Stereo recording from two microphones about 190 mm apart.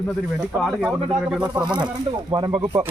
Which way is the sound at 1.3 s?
5° right (ahead or behind).